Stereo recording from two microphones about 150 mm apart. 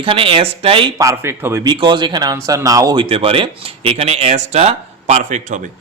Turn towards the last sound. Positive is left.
turn(degrees=-55)  # may be behind; listen again after turning